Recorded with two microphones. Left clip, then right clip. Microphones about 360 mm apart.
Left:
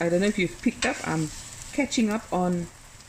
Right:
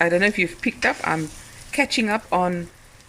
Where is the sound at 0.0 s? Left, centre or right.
Right.